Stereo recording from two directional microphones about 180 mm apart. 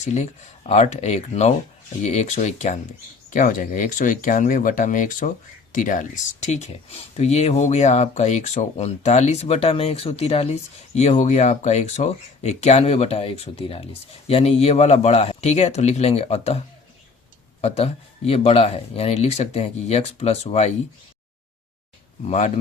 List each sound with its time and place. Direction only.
0.0 s speech: 40° left (ahead or behind)
22.2 s speech: 40° left (ahead or behind)